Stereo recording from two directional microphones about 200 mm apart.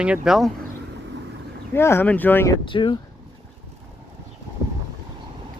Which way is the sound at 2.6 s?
25° left (ahead or behind).